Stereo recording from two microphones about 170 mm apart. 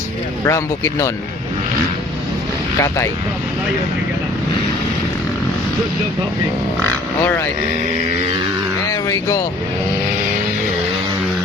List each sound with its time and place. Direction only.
0.4 s speech: 20° left (ahead or behind)
2.7 s speech: 15° left (ahead or behind)
6.8 s speech: 10° left (ahead or behind)
8.9 s speech: 20° left (ahead or behind)